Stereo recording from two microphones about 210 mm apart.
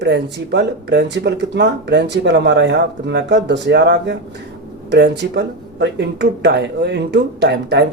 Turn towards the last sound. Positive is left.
turn(degrees=-55)  # may be behind; listen again after turning